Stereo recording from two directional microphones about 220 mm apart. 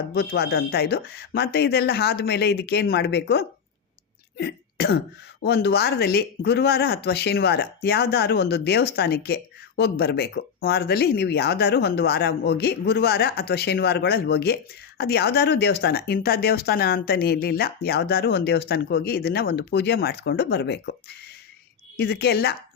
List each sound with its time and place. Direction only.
0.1 s speech: 45° left (ahead or behind)